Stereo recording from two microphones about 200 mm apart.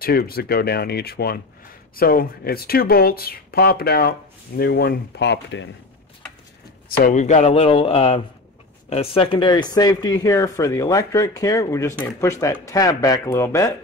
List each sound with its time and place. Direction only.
0.0 s speech: 50° left (ahead or behind)
7.1 s speech: 35° left (ahead or behind); by 13.7 s 15° left (ahead or behind)